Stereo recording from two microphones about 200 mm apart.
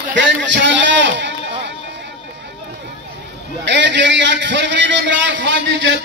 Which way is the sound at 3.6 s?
60° right (ahead or behind).